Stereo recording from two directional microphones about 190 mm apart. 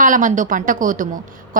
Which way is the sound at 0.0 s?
45° right (ahead or behind).